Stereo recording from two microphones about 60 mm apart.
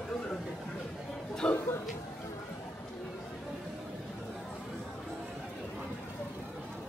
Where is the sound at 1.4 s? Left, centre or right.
Centre.